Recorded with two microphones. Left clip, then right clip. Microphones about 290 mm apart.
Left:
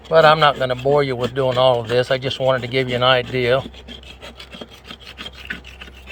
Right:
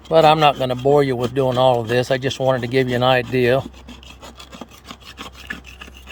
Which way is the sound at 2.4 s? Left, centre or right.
Right.